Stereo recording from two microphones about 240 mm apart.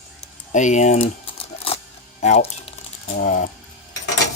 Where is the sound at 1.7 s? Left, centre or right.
Left.